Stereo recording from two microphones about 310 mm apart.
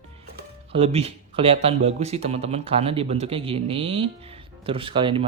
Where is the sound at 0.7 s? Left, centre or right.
Centre.